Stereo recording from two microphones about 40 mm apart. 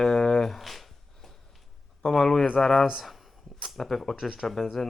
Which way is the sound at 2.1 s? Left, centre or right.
Centre.